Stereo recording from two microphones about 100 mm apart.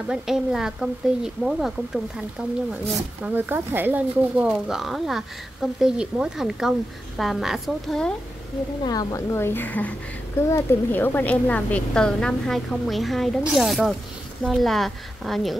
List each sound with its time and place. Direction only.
0.0 s a woman's voice: 5° right (ahead or behind)
2.8 s a woman's voice: 20° right (ahead or behind); by 8.1 s centre (ahead or behind)
8.8 s speech: 40° left (ahead or behind)
9.3 s a woman's voice: 25° left (ahead or behind); by 15.5 s centre (ahead or behind)